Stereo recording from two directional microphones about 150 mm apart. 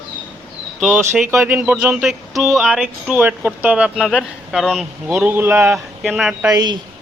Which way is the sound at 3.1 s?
10° right (ahead or behind).